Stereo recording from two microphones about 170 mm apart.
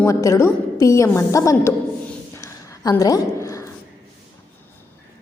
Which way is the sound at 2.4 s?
15° left (ahead or behind).